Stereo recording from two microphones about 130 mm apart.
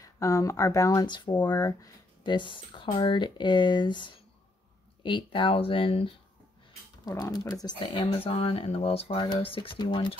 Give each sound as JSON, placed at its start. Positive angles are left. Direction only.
{"t": 0.0, "sound": "speech", "side_deg": 25}
{"t": 2.2, "sound": "speech", "side_deg": 40}
{"t": 7.1, "sound": "speech", "side_deg": 30}